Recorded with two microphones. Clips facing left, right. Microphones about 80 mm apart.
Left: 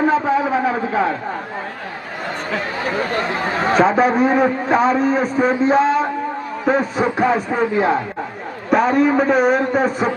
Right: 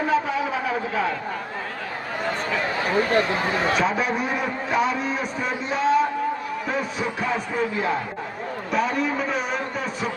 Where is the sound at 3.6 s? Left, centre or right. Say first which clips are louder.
Left 11 dB; left.